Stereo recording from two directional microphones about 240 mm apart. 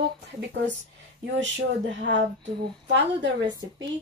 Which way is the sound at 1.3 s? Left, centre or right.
Right.